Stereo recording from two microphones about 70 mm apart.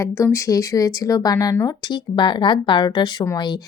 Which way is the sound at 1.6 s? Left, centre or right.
Left.